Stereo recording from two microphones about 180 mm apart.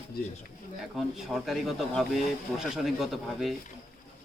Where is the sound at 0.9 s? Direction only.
Centre (ahead or behind).